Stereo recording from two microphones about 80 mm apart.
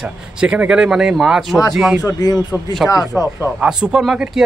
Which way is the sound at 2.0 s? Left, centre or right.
Left.